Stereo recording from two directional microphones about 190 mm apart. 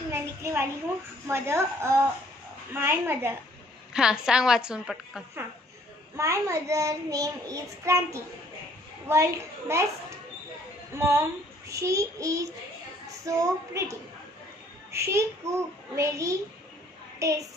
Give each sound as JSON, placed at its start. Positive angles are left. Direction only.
{"t": 0.1, "sound": "a sound", "side_deg": -15}
{"t": 1.2, "sound": "child singing", "side_deg": -15}
{"t": 3.9, "sound": "a woman's voice", "side_deg": -5}
{"t": 6.1, "sound": "child singing", "side_deg": -15}
{"t": 11.0, "sound": "child singing", "side_deg": -15}
{"t": 14.9, "sound": "a child's voice", "side_deg": -15}
{"t": 15.4, "sound": "child singing", "side_deg": -15}
{"t": 17.2, "sound": "a child's voice", "side_deg": -15}